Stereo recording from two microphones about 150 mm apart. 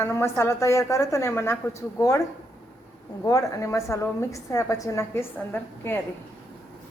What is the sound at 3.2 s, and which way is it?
A woman's voice, 20° left (ahead or behind).